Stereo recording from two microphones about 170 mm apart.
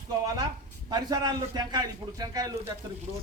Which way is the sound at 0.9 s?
25° right (ahead or behind).